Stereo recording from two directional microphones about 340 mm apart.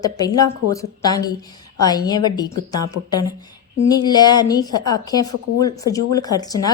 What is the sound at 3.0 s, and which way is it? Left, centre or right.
Speech, left.